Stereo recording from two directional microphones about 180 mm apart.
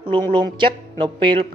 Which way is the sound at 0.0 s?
25° right (ahead or behind).